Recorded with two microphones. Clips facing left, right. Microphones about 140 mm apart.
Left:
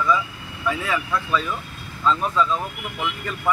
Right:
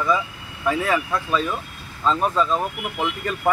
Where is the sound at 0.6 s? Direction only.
40° right (ahead or behind).